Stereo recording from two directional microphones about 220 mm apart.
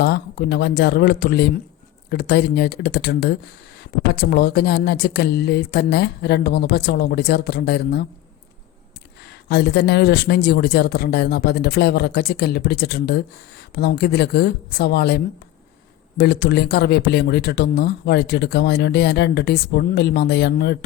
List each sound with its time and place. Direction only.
0.0 s speech: 45° left (ahead or behind)
9.2 s speech: 50° left (ahead or behind)